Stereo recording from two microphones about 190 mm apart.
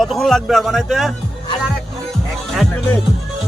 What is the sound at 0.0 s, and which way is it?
Speech, centre (ahead or behind).